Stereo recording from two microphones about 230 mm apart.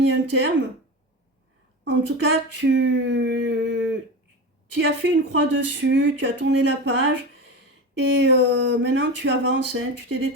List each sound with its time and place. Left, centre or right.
0.0 s speech: right
1.8 s speech: right